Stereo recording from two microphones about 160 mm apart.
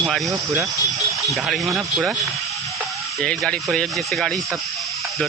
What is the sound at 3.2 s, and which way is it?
Speech, 5° left (ahead or behind).